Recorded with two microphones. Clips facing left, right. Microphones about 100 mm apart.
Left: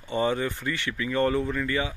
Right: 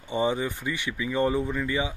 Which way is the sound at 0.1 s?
15° right (ahead or behind).